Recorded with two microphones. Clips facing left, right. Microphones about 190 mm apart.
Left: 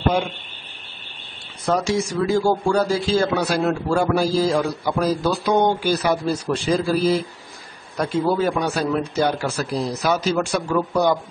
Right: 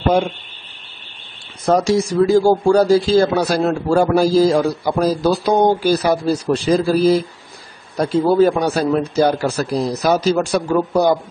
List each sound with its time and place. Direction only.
1.7 s speech: 35° right (ahead or behind)